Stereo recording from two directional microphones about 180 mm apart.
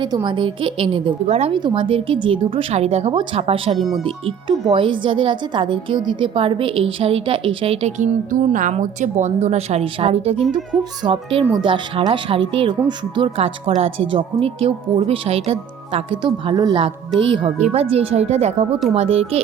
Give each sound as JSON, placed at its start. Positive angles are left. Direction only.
{"t": 0.0, "sound": "a woman's voice", "side_deg": -25}